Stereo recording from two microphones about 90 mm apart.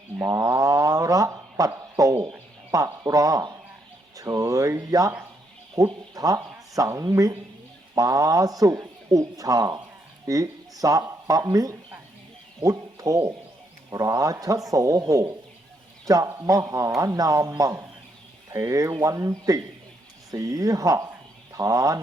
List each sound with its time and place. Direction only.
0.3 s speech: 35° right (ahead or behind)